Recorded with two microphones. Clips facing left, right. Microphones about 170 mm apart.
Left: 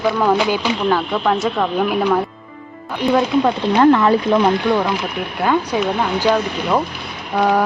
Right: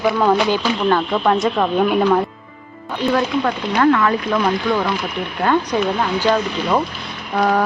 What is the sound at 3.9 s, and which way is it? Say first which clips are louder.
Speech: left 4 dB; 30° left (ahead or behind).